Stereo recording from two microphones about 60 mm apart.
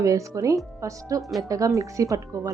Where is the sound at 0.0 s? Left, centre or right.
Right.